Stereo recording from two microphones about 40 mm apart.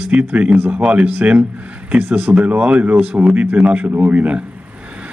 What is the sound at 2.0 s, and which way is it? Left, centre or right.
Speech, right.